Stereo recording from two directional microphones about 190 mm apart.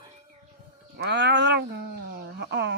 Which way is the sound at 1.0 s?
65° right (ahead or behind).